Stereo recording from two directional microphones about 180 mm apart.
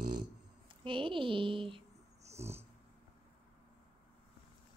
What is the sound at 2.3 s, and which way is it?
Dog, 35° right (ahead or behind).